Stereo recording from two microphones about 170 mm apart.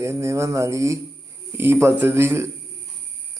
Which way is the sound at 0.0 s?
15° right (ahead or behind).